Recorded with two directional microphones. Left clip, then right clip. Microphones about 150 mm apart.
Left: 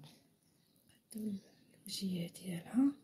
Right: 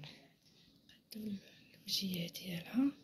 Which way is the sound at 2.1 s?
45° left (ahead or behind).